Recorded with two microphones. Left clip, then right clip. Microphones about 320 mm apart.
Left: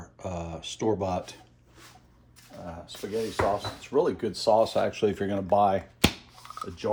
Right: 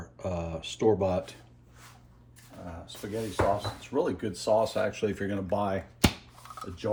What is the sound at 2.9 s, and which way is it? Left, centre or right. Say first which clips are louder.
Speech: left 4 dB; centre.